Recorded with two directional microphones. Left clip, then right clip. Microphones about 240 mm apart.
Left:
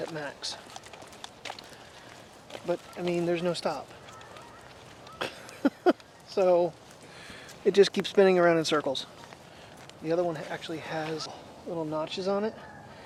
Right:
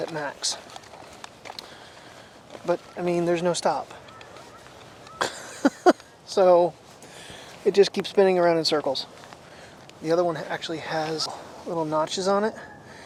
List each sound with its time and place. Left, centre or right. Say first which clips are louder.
0.0 s speech: right 6 dB; right
2.6 s speech: right 6 dB; centre
5.1 s a sound: right 8 dB; right
7.6 s speech: right 3 dB; centre
10.0 s speech: right 6 dB; right